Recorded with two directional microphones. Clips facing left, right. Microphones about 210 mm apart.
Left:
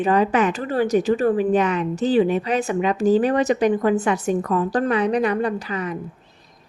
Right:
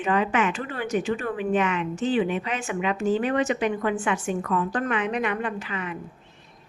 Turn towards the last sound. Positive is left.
turn(degrees=40)  # may be behind; listen again after turning